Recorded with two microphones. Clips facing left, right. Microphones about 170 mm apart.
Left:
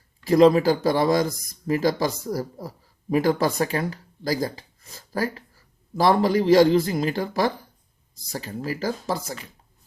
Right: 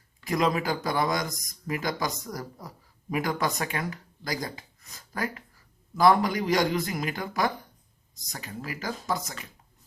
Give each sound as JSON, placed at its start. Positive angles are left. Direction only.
{"t": 0.3, "sound": "speech", "side_deg": 30}